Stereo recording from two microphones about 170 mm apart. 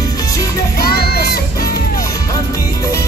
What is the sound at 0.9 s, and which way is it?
Music, 65° left (ahead or behind).